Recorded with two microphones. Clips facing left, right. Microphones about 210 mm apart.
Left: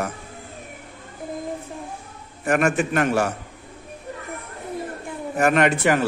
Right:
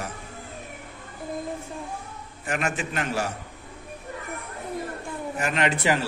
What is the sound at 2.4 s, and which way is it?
Speech, 50° left (ahead or behind).